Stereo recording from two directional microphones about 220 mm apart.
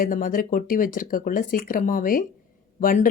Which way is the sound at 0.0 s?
40° left (ahead or behind).